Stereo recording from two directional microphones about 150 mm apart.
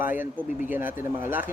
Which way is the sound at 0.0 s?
15° right (ahead or behind).